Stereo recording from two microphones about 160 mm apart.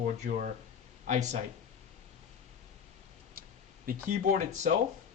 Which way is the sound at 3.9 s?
60° right (ahead or behind).